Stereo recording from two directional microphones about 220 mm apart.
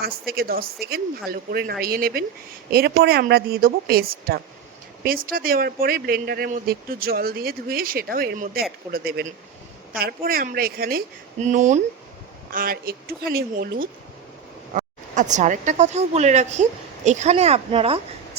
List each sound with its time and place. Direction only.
0.0 s speech: 45° right (ahead or behind); by 18.0 s 25° right (ahead or behind)